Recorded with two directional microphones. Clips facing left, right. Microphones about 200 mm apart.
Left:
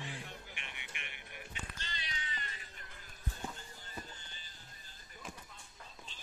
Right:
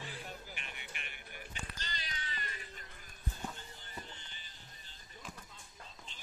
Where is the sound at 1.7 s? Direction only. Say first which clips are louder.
Right 1 dB; 40° right (ahead or behind).